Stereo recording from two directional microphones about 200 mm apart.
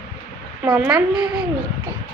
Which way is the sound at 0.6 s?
5° right (ahead or behind).